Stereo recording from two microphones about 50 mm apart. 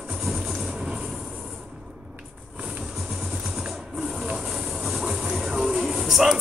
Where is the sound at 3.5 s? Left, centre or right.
Centre.